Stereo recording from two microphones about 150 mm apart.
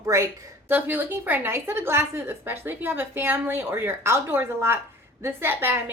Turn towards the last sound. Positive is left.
turn(degrees=-15)  # may be behind; listen again after turning